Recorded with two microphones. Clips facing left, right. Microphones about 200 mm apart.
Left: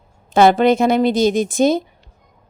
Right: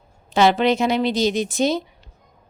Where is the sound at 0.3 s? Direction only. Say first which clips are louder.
Left 5 dB; 50° left (ahead or behind).